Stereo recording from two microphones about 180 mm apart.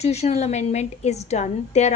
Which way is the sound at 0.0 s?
35° left (ahead or behind).